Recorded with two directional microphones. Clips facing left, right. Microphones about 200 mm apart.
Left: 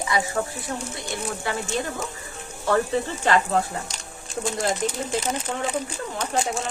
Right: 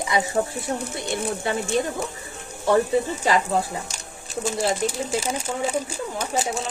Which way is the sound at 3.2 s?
10° right (ahead or behind).